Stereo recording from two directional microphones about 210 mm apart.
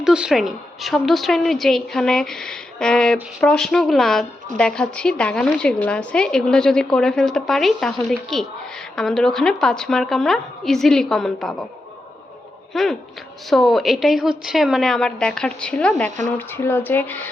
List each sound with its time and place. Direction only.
0.0 s a woman's voice: 5° right (ahead or behind)
12.7 s a woman's voice: centre (ahead or behind)
16.0 s speech: 35° right (ahead or behind)
16.4 s speech: 10° left (ahead or behind)